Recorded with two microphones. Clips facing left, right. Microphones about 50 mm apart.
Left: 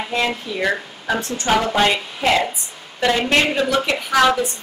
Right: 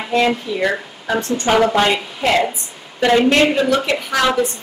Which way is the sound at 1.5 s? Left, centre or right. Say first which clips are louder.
Right 3 dB; centre.